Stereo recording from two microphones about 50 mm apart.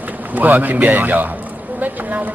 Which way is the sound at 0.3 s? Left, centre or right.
Right.